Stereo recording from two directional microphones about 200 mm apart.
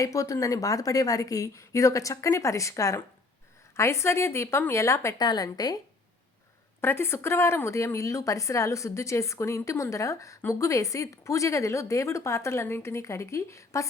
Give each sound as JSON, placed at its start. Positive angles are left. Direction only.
{"t": 0.0, "sound": "a woman's voice", "side_deg": 15}
{"t": 6.8, "sound": "a woman's voice", "side_deg": 10}